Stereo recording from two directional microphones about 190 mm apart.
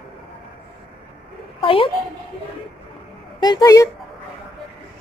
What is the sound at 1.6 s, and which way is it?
Speech, 30° left (ahead or behind).